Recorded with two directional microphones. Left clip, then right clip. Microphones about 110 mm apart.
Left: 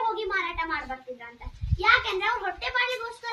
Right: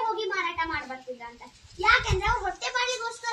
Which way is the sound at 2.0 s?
10° right (ahead or behind).